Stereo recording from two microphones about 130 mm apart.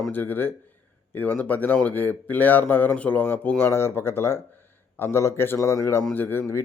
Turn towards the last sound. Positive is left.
turn(degrees=20)  # may be behind; listen again after turning